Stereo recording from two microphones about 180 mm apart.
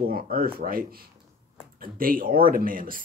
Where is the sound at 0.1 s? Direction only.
55° right (ahead or behind).